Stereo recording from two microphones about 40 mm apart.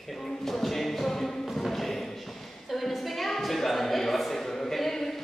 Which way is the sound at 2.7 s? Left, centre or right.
Centre.